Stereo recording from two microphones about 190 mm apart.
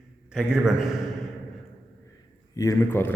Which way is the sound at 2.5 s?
20° left (ahead or behind).